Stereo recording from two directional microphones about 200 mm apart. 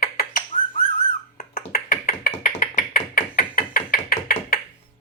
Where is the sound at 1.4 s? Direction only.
45° left (ahead or behind).